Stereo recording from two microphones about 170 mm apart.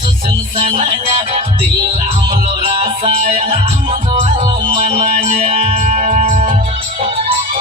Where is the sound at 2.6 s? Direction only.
35° right (ahead or behind).